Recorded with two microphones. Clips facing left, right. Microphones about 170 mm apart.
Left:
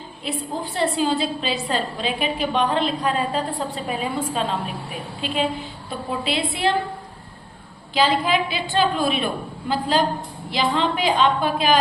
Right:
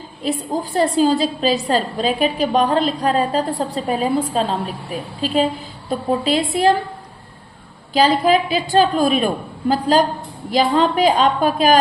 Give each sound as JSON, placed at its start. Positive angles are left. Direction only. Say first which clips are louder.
{"t": 0.2, "sound": "a woman's voice", "louder": "right 6 dB", "side_deg": -40}
{"t": 7.9, "sound": "a woman's voice", "louder": "right 5 dB", "side_deg": -40}